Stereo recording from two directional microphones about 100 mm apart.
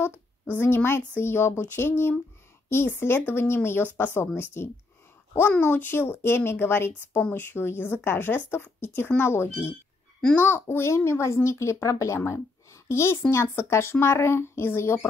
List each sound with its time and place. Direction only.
0.0 s a woman's voice: 25° left (ahead or behind)